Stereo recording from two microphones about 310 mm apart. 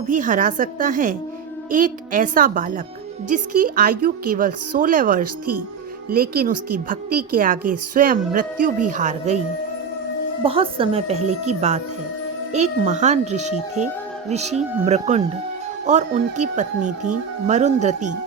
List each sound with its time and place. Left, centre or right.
0.1 s speech: right
10.4 s speech: centre
16.8 s speech: right
17.4 s speech: right